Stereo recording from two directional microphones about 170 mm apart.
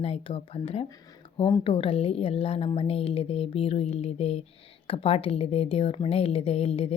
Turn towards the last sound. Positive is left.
turn(degrees=35)  # may be behind; listen again after turning